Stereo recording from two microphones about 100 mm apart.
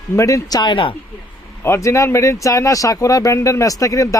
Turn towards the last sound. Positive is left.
turn(degrees=35)  # may be behind; listen again after turning